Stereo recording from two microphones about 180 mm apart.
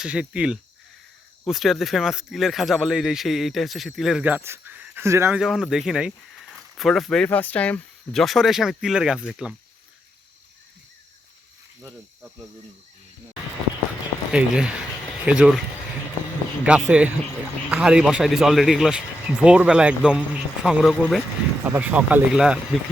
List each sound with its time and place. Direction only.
0.0 s speech: 5° right (ahead or behind)
5.4 s speech: centre (ahead or behind)
11.8 s speech: 15° right (ahead or behind)
14.3 s speech: 5° right (ahead or behind)
16.6 s speech: 5° right (ahead or behind)